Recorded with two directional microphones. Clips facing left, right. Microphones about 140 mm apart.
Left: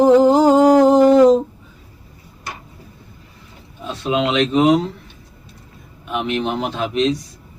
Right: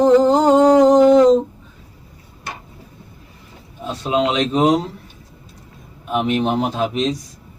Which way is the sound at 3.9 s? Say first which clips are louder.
Right 1 dB; 35° right (ahead or behind).